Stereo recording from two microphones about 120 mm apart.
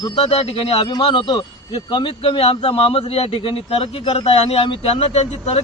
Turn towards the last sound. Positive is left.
turn(degrees=60)  # may be behind; listen again after turning